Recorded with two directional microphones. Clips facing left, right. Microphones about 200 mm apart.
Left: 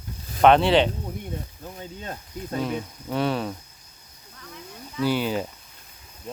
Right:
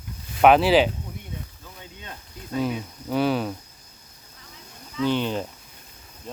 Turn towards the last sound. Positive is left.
turn(degrees=5)  # may be behind; listen again after turning